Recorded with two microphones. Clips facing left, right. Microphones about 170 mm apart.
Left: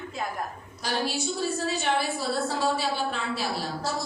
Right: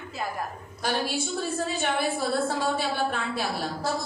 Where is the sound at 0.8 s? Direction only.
50° right (ahead or behind).